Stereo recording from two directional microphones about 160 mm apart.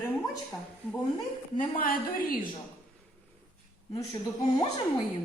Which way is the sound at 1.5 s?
60° left (ahead or behind).